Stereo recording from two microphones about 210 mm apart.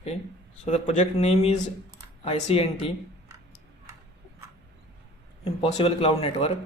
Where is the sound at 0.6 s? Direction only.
30° left (ahead or behind).